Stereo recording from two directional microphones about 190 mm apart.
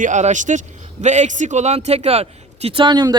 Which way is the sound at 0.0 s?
40° right (ahead or behind).